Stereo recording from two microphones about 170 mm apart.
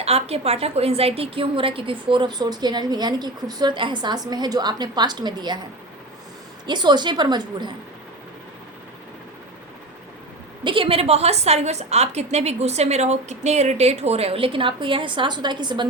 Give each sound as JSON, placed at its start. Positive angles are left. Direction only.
{"t": 0.0, "sound": "a woman's voice", "side_deg": -35}
{"t": 6.7, "sound": "a woman's voice", "side_deg": -25}
{"t": 10.6, "sound": "a woman's voice", "side_deg": -30}